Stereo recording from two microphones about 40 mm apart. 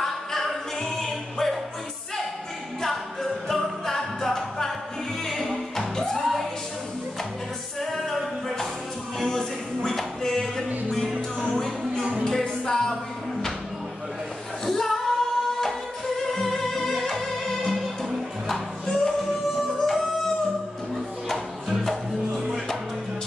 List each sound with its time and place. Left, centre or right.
0.0 s singing: centre
3.4 s music: centre
7.8 s music: centre
11.8 s music: right
12.3 s music: centre
14.7 s music: centre